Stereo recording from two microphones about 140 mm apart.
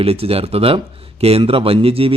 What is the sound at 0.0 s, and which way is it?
A man's voice, 45° right (ahead or behind).